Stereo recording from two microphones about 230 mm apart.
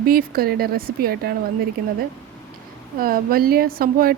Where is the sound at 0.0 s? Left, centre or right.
Right.